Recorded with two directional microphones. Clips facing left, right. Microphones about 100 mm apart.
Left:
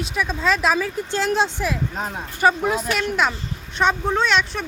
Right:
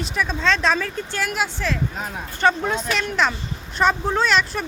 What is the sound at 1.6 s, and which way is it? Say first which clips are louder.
Speech: left 1 dB; 15° left (ahead or behind).